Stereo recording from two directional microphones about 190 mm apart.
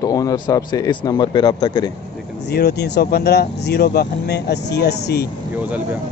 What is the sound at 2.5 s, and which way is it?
Speech, 60° left (ahead or behind).